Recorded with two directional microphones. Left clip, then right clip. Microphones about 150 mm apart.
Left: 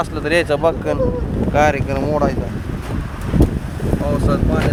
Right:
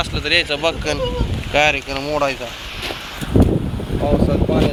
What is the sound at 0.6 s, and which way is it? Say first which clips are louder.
Speech: left 3 dB; 25° left (ahead or behind).